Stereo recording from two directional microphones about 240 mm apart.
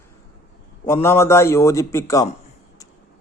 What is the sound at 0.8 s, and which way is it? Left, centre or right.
A man's voice, centre.